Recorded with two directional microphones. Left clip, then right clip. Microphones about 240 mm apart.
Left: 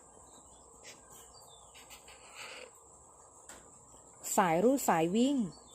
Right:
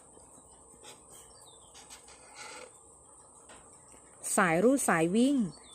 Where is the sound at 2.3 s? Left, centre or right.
Right.